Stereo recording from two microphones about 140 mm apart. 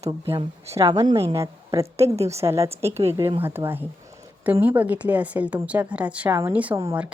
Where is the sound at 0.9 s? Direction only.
20° right (ahead or behind).